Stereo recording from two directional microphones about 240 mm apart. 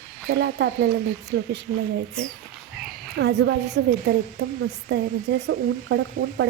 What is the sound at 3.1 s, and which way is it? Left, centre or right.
Speech, right.